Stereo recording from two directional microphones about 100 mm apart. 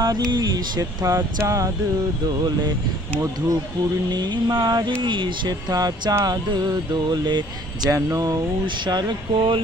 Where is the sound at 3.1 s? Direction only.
25° right (ahead or behind).